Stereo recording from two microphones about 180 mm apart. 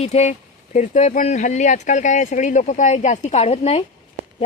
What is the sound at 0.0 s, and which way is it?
Speech, 40° left (ahead or behind).